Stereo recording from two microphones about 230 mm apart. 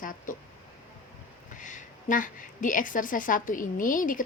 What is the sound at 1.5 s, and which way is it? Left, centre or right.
A woman's voice, left.